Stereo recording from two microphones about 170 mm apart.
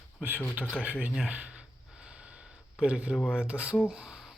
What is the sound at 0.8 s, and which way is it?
Gasp, 10° right (ahead or behind).